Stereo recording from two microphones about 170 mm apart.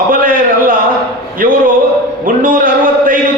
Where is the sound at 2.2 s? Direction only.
55° right (ahead or behind).